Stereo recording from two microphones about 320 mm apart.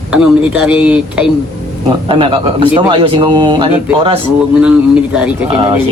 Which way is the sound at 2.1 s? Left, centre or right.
Centre.